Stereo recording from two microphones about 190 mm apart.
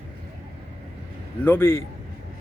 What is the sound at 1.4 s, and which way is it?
Speech, 10° left (ahead or behind).